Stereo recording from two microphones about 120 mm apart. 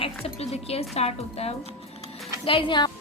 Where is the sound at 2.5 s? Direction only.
45° left (ahead or behind).